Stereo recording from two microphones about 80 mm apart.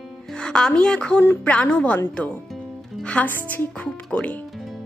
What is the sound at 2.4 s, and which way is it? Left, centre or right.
Music, centre.